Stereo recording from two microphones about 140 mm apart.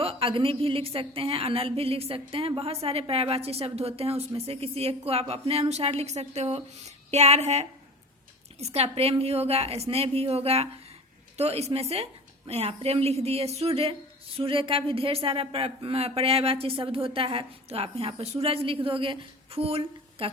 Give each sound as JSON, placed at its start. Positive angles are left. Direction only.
{"t": 0.0, "sound": "a woman's voice", "side_deg": -40}